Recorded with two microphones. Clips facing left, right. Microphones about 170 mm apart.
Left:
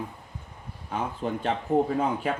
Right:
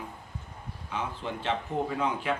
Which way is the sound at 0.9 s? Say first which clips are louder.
Left 5 dB; 45° left (ahead or behind).